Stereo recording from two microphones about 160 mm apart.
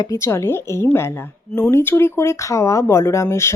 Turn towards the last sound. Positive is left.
turn(degrees=15)  # may be behind; listen again after turning